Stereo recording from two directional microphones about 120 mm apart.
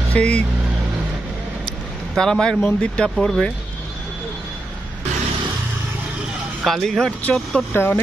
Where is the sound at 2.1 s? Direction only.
5° left (ahead or behind).